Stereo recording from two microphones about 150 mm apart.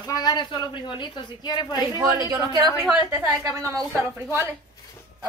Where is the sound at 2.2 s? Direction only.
25° right (ahead or behind).